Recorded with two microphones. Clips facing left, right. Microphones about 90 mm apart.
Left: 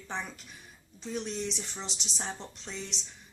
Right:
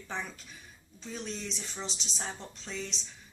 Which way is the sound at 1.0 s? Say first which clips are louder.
Left 4 dB; 20° left (ahead or behind).